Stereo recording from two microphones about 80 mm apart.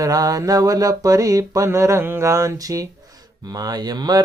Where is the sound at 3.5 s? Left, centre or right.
Right.